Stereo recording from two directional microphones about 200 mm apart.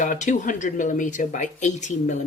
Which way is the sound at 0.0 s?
40° left (ahead or behind).